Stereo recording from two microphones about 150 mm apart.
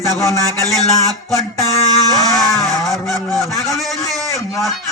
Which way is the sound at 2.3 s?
Centre (ahead or behind).